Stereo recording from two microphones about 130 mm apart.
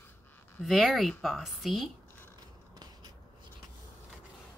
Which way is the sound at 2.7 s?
30° right (ahead or behind).